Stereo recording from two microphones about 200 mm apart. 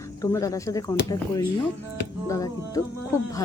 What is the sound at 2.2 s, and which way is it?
Speech, 15° left (ahead or behind).